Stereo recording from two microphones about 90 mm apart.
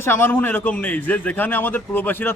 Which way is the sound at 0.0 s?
25° left (ahead or behind).